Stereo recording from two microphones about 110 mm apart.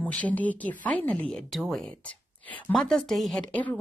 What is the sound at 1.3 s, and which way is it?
Speech, 5° left (ahead or behind).